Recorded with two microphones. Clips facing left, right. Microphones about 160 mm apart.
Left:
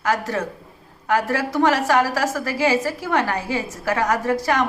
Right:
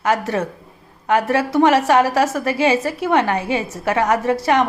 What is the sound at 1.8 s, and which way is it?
A woman's voice, 25° right (ahead or behind).